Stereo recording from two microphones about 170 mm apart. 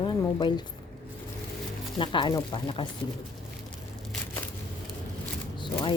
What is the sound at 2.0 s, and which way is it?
Speech, 30° left (ahead or behind).